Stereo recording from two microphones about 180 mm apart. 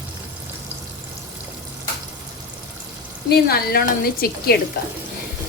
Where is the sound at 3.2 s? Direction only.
60° left (ahead or behind).